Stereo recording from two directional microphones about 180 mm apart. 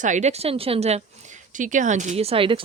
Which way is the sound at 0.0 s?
40° right (ahead or behind).